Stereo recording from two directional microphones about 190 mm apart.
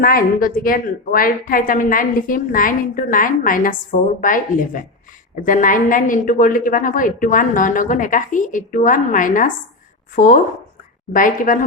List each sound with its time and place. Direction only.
0.0 s a woman's voice: 50° left (ahead or behind)